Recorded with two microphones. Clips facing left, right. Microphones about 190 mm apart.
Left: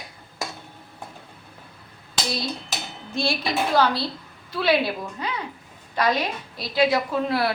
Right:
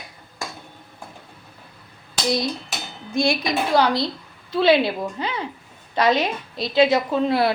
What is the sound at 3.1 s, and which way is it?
A woman's voice, 15° right (ahead or behind).